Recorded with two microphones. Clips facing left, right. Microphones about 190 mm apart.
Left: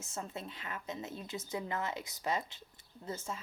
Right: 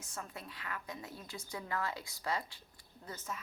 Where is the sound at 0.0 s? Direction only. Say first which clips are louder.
Left 4 dB; 25° left (ahead or behind).